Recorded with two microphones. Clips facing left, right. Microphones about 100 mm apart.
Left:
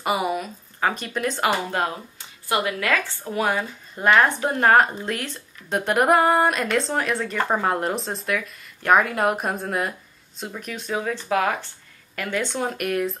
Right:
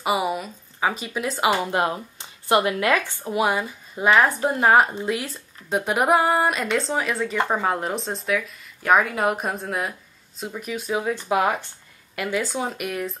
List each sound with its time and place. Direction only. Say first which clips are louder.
0.0 s speech: even; centre (ahead or behind)
1.7 s speech: right 2 dB; 20° right (ahead or behind); by 13.2 s centre (ahead or behind)